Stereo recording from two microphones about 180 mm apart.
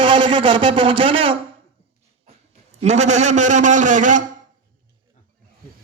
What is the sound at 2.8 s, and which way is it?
A man's voice, 40° right (ahead or behind).